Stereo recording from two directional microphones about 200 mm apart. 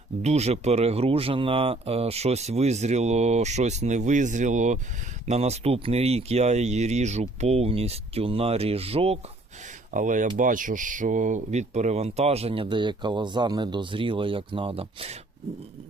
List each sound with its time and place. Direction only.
0.2 s speech: 35° right (ahead or behind)
9.9 s speech: 40° right (ahead or behind)